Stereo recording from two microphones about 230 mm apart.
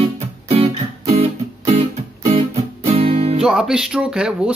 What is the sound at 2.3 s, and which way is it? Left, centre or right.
Music, right.